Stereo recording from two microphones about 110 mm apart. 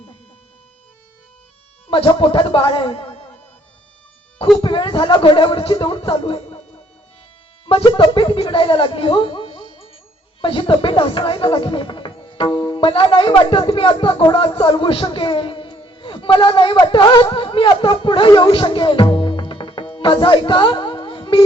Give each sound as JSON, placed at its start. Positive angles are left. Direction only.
{"t": 1.9, "sound": "a man's voice", "side_deg": 55}
{"t": 4.5, "sound": "a man's voice", "side_deg": 50}
{"t": 7.7, "sound": "speech", "side_deg": 60}